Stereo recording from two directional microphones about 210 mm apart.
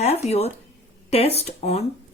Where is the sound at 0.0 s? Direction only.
30° left (ahead or behind).